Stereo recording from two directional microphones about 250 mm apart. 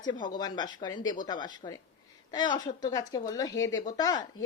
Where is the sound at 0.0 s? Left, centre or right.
Centre.